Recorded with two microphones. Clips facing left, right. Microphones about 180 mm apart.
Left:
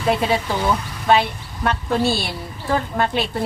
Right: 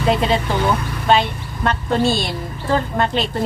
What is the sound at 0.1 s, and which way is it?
A woman's voice, 5° left (ahead or behind).